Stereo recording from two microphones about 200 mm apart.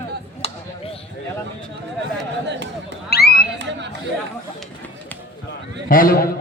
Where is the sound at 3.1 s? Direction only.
50° left (ahead or behind).